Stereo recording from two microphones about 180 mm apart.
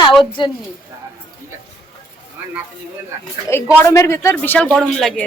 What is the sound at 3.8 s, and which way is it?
Speech, 15° left (ahead or behind).